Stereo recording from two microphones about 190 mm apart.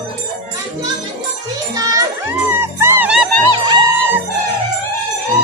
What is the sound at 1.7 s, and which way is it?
Music, 15° right (ahead or behind).